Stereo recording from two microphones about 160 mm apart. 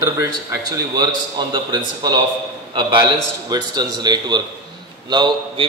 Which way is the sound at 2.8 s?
30° right (ahead or behind).